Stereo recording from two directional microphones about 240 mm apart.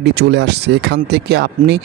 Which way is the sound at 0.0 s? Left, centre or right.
Right.